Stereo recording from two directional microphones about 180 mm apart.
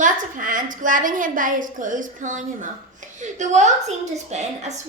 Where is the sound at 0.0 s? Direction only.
50° right (ahead or behind).